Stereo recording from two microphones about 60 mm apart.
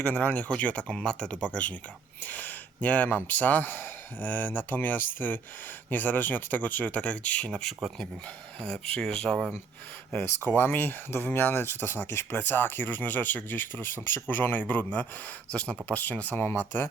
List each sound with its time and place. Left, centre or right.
0.1 s speech: left
8.6 s speech: centre
10.6 s speech: left
15.9 s speech: left
16.5 s speech: left